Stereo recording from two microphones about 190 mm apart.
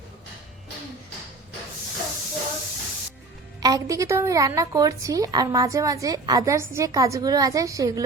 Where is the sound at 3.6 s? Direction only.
20° right (ahead or behind).